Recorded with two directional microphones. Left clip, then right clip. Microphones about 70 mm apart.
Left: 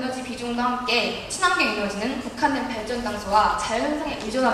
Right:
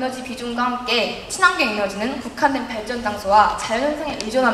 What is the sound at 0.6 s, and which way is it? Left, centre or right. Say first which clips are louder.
A woman's voice: right 3 dB; right.